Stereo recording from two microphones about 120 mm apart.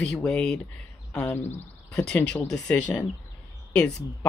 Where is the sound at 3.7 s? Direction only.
10° left (ahead or behind).